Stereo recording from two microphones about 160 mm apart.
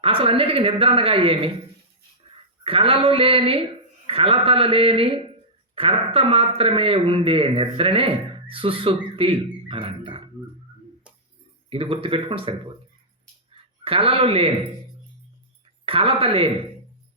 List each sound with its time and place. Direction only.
0.0 s speech: 35° right (ahead or behind)
2.6 s speech: 35° right (ahead or behind)
11.7 s speech: 35° right (ahead or behind)
15.9 s speech: 35° right (ahead or behind)